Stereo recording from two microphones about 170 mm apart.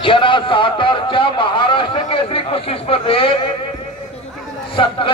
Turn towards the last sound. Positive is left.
turn(degrees=30)  # may be behind; listen again after turning